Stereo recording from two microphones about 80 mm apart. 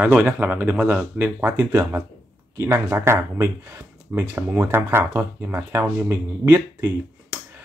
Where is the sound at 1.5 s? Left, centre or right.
Right.